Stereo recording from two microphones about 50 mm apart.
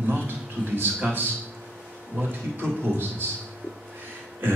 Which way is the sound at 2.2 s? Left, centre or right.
Right.